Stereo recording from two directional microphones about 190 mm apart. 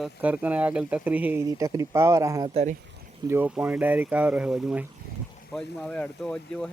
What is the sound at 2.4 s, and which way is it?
Speech, 35° right (ahead or behind).